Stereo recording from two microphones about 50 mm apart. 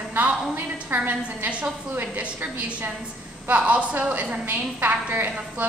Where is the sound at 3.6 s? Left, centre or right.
Right.